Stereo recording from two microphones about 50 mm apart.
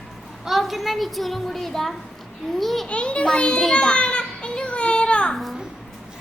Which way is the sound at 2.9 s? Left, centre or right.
Left.